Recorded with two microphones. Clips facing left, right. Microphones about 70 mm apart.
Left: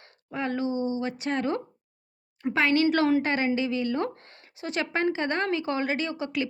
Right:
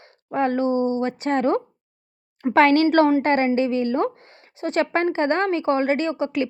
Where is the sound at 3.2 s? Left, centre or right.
Right.